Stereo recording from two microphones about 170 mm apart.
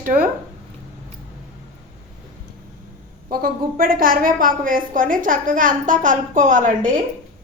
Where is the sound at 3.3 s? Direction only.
55° right (ahead or behind).